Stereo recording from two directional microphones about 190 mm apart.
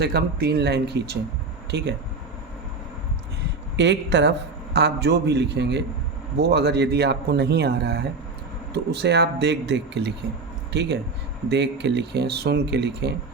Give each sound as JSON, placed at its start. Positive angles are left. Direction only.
{"t": 0.0, "sound": "a man's voice", "side_deg": -55}
{"t": 3.8, "sound": "a man's voice", "side_deg": -65}